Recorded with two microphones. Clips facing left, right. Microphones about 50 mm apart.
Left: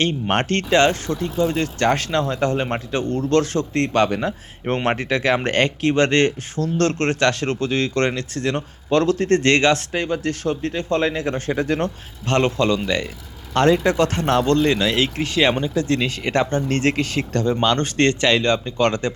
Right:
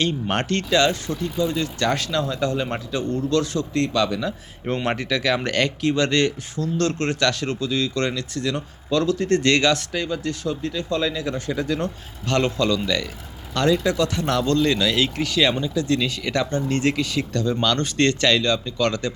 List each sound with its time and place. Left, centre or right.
0.0 s speech: left